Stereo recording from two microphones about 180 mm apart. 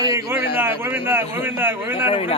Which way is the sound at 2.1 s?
35° left (ahead or behind).